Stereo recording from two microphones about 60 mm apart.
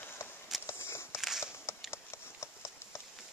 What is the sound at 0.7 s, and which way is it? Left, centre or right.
Walk, left.